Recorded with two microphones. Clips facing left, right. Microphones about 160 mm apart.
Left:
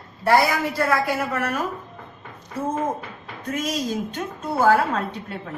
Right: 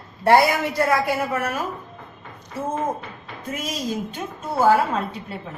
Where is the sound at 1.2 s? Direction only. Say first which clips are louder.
Even; 10° right (ahead or behind).